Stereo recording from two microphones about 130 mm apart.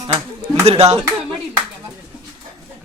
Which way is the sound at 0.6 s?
55° right (ahead or behind).